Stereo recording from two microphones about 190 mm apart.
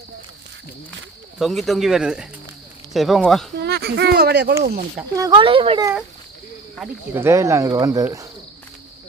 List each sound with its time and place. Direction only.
1.4 s speech: centre (ahead or behind)
3.6 s speech: 60° right (ahead or behind)
4.6 s speech: 45° right (ahead or behind)
5.1 s speech: 15° right (ahead or behind)
5.4 s speech: 30° right (ahead or behind)
7.1 s speech: 15° right (ahead or behind)